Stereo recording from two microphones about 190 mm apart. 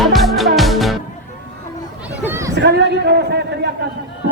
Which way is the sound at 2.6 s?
65° right (ahead or behind).